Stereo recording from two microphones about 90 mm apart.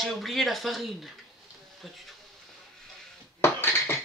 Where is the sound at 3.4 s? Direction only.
25° left (ahead or behind).